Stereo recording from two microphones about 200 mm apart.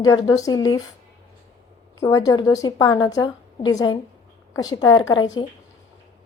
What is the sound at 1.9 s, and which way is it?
A woman's voice, 15° left (ahead or behind).